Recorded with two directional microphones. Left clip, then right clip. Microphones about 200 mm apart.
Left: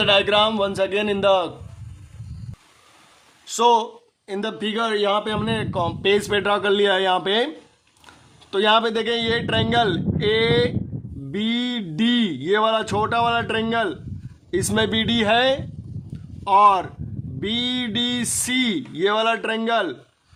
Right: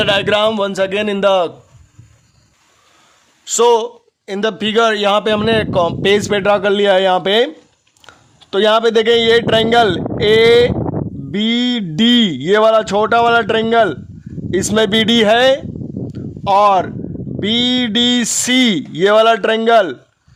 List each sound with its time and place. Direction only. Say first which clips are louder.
0.0 s speech: right 4 dB; 40° right (ahead or behind)
3.4 s speech: right 5 dB; 45° right (ahead or behind)
5.8 s a man's voice: right 7 dB; 35° right (ahead or behind)
16.1 s a sound: right 4 dB; 40° right (ahead or behind)
17.4 s speech: right 9 dB; 40° right (ahead or behind)